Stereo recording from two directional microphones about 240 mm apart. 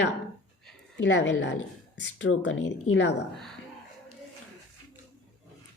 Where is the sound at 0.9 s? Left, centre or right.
Left.